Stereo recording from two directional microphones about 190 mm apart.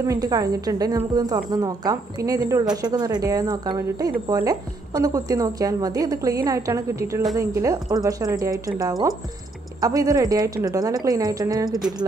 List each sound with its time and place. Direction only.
0.0 s a woman's voice: 20° right (ahead or behind)